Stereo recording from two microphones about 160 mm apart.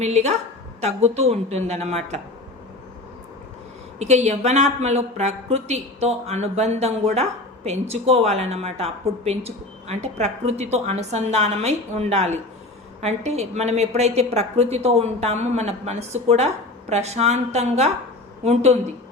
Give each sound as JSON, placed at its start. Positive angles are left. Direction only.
{"t": 0.0, "sound": "a woman's voice", "side_deg": -45}
{"t": 3.9, "sound": "a woman's voice", "side_deg": -45}